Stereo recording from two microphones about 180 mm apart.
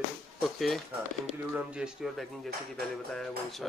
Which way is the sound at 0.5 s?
Centre (ahead or behind).